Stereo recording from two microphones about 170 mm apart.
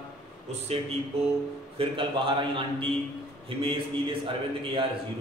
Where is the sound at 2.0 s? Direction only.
30° right (ahead or behind).